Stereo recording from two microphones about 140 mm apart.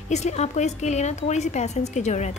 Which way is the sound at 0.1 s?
50° left (ahead or behind).